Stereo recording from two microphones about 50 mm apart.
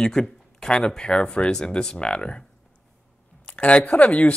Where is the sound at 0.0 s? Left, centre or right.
Centre.